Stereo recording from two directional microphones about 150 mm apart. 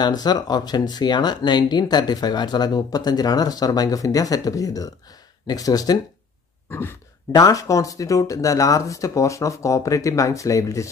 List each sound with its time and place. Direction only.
0.0 s speech: 25° left (ahead or behind)